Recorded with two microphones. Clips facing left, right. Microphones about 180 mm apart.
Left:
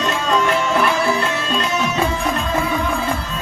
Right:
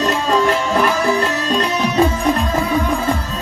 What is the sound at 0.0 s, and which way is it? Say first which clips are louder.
Music: right 3 dB; 35° right (ahead or behind).